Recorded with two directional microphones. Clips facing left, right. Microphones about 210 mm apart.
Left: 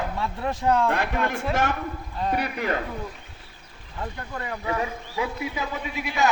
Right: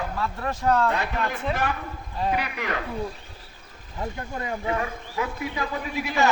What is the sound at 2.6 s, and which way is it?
Speech, 40° left (ahead or behind).